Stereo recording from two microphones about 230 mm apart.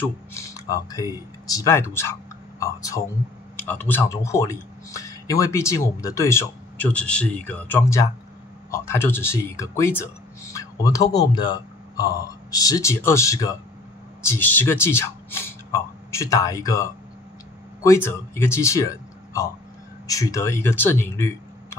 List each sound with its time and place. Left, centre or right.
0.0 s speech: centre